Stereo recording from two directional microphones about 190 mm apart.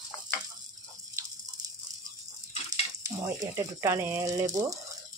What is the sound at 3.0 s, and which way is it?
Speech, 15° right (ahead or behind).